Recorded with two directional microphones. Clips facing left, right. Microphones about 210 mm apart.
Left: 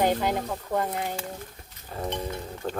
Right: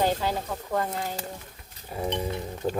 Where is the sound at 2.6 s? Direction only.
10° right (ahead or behind).